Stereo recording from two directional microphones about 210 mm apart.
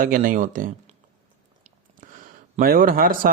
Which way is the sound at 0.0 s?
40° right (ahead or behind).